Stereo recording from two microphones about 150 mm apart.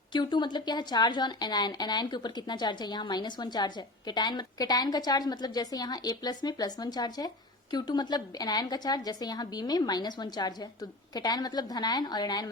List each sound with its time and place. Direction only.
0.1 s a woman's voice: 30° left (ahead or behind)